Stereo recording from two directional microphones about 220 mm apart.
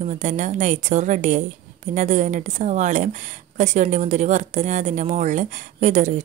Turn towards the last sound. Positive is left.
turn(degrees=-35)  # may be behind; listen again after turning